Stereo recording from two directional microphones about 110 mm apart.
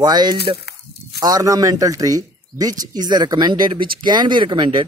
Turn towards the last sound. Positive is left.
turn(degrees=-45)  # may be behind; listen again after turning